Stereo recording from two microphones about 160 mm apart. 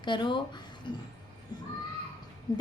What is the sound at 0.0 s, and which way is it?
Speech, 30° left (ahead or behind).